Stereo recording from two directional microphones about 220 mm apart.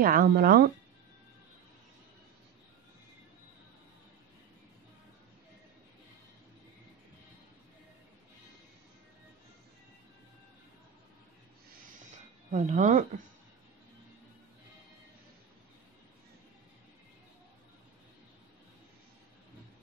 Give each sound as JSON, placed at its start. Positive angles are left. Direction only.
{"t": 0.0, "sound": "speech", "side_deg": -40}
{"t": 12.1, "sound": "music", "side_deg": -30}